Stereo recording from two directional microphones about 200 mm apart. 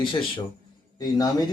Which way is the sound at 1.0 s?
20° left (ahead or behind).